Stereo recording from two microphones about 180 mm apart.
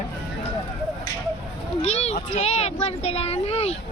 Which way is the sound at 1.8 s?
35° left (ahead or behind).